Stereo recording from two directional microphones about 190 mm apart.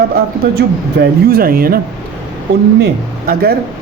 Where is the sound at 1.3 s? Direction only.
50° right (ahead or behind).